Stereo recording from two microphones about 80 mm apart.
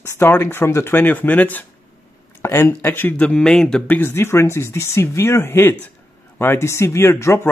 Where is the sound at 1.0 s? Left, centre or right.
Left.